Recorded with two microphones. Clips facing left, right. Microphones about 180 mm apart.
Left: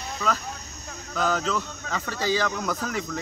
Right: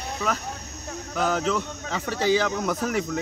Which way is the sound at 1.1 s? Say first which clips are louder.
Right 1 dB; 20° right (ahead or behind).